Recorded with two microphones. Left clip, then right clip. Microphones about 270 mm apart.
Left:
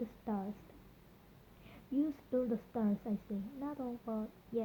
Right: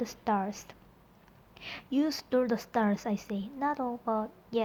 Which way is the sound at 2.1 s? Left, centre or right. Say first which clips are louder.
Right 8 dB; right.